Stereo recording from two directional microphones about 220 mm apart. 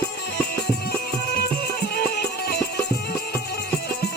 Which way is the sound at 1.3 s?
45° left (ahead or behind).